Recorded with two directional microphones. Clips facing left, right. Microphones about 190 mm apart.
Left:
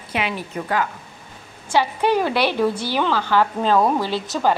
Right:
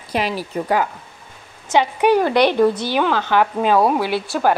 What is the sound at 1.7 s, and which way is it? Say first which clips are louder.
Speech: right 3 dB; 15° right (ahead or behind).